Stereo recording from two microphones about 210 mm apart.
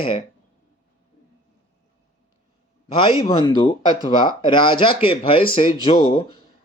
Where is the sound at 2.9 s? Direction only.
25° left (ahead or behind).